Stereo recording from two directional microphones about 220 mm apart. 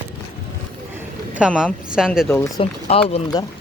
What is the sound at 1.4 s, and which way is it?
Speech, 5° right (ahead or behind).